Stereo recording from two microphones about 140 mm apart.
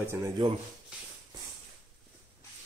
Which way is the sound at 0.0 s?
15° right (ahead or behind).